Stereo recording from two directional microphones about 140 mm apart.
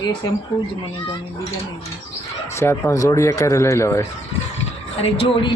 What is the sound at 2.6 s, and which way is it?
Speech, 20° left (ahead or behind).